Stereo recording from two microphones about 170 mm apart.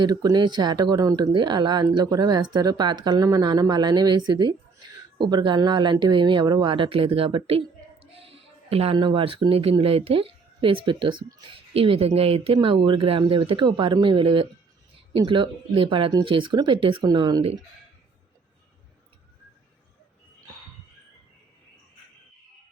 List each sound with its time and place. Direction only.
0.0 s speech: 25° right (ahead or behind)